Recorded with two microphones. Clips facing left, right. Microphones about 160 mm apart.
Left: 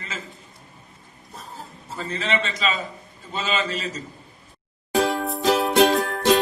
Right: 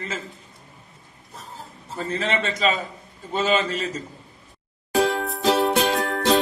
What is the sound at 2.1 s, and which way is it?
A man's voice, 50° right (ahead or behind).